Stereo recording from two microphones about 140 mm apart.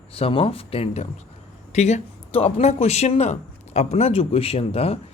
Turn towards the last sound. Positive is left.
turn(degrees=45)  # may be behind; listen again after turning